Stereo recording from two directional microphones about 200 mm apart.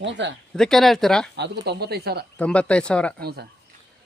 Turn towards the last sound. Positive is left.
turn(degrees=-55)  # may be behind; listen again after turning